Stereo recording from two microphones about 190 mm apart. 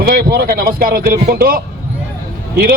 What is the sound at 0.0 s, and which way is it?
A man's voice, 50° right (ahead or behind).